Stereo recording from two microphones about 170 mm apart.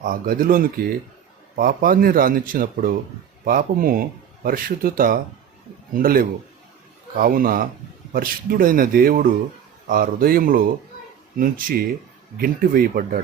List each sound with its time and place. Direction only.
0.0 s speech: 55° right (ahead or behind)